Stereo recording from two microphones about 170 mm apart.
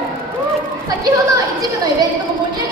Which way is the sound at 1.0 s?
20° right (ahead or behind).